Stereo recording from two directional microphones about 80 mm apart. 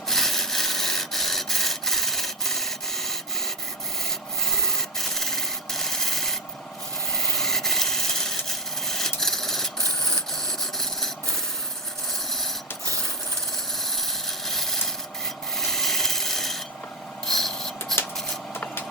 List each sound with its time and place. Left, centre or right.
0.1 s printer: centre
4.9 s sanding: centre
7.3 s rub: centre
13.9 s a sound: centre
15.5 s rub: centre
17.2 s filing: centre
18.5 s vehicle: left